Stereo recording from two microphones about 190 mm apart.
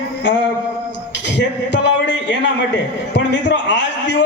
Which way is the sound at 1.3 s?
70° left (ahead or behind).